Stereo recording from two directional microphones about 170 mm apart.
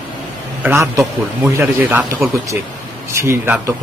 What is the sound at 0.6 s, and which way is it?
A man's voice, 15° right (ahead or behind).